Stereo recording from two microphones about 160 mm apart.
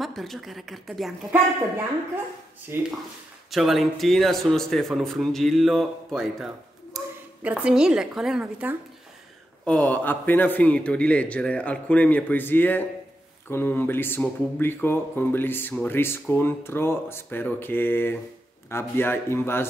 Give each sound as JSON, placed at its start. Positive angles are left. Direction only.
{"t": 0.0, "sound": "speech", "side_deg": 0}
{"t": 2.7, "sound": "speech", "side_deg": -15}
{"t": 3.4, "sound": "speech", "side_deg": 0}
{"t": 7.0, "sound": "a sound", "side_deg": -20}
{"t": 7.4, "sound": "speech", "side_deg": -5}
{"t": 9.7, "sound": "speech", "side_deg": 10}